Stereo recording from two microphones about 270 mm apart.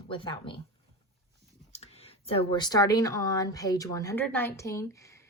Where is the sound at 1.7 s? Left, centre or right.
Left.